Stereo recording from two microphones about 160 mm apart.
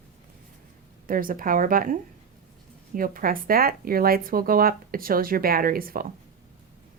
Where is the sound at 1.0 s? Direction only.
60° right (ahead or behind).